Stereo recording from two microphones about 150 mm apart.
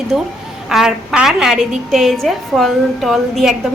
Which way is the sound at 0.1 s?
5° right (ahead or behind).